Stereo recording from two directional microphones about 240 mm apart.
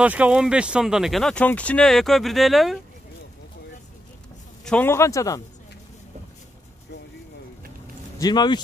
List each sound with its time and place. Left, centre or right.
0.0 s speech: centre
4.6 s a man's voice: centre
8.2 s a man's voice: centre